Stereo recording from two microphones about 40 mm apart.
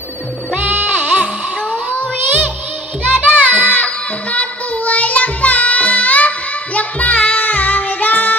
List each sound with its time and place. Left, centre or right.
0.5 s music: right
1.0 s sheep: right
1.7 s child singing: left
3.1 s music: right
3.7 s music: left
7.3 s child singing: left